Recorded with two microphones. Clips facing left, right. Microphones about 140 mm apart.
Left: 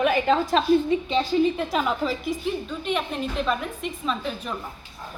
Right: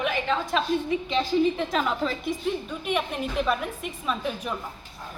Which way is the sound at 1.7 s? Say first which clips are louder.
Left 2 dB; 5° left (ahead or behind).